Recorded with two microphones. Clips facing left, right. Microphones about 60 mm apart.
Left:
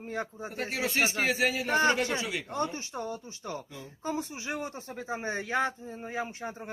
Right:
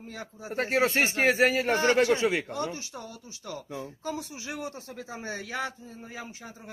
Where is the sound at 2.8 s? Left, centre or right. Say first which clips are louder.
Left 5 dB; left.